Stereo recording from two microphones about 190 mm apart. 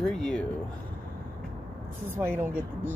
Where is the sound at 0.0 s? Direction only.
5° left (ahead or behind).